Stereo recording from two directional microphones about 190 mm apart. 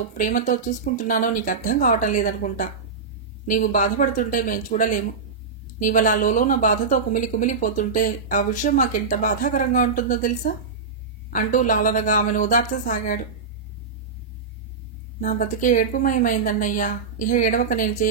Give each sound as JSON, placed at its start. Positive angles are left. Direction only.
{"t": 0.2, "sound": "a woman's voice", "side_deg": 45}
{"t": 15.1, "sound": "a woman's voice", "side_deg": 45}